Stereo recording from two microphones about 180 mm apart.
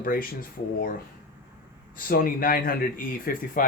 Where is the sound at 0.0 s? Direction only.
50° left (ahead or behind).